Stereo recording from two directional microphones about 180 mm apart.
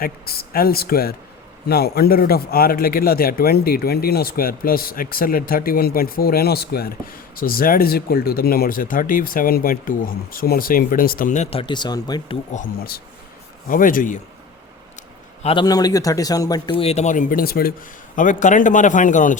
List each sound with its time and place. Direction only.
0.0 s a man's voice: 55° left (ahead or behind); by 11.6 s 40° left (ahead or behind)
11.6 s a man's voice: 25° left (ahead or behind)
12.5 s a man's voice: 55° left (ahead or behind)
15.4 s a man's voice: 25° left (ahead or behind)
16.7 s speech: 35° left (ahead or behind); by 17.7 s 55° left (ahead or behind)
18.2 s speech: 45° left (ahead or behind)